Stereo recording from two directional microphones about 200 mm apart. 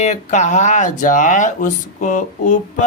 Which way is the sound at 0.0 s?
35° left (ahead or behind).